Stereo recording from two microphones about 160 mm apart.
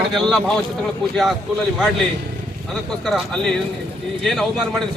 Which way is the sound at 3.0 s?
5° left (ahead or behind).